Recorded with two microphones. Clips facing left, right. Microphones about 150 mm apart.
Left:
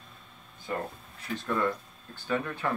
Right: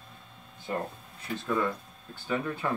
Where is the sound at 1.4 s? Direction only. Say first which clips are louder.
Even; 10° right (ahead or behind).